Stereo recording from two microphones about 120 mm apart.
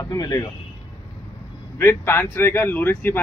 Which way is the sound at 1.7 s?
20° left (ahead or behind).